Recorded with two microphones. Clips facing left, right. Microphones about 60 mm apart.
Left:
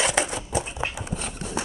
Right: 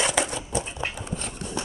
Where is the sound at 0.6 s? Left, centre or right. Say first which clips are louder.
Left 2 dB; centre.